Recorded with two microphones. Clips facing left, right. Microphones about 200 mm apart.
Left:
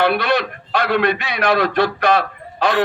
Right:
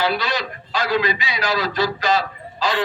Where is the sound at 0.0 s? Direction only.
60° left (ahead or behind).